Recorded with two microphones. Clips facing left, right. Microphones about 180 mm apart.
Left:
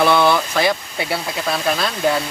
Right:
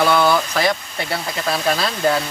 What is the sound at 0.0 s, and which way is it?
Speech, centre (ahead or behind).